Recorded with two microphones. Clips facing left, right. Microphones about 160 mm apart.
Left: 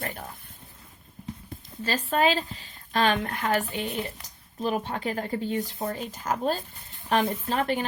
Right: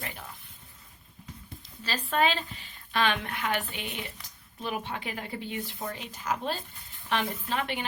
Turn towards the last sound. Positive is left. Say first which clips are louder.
# left 5 dB
turn(degrees=40)  # may be behind; listen again after turning